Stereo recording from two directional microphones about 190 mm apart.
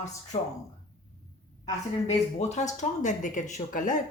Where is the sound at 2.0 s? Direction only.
35° left (ahead or behind).